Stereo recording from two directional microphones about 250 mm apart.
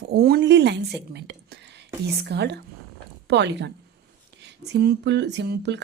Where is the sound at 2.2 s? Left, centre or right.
Right.